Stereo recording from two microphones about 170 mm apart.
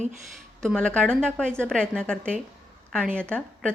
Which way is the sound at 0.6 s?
5° left (ahead or behind).